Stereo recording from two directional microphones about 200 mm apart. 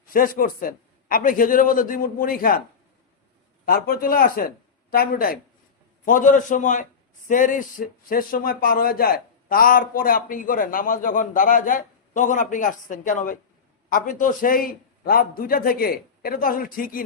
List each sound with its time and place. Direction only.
0.0 s speech: 45° left (ahead or behind)
3.7 s a man's voice: 50° left (ahead or behind)